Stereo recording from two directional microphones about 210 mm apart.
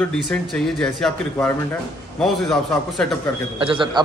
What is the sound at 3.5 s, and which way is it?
Speech, 25° right (ahead or behind).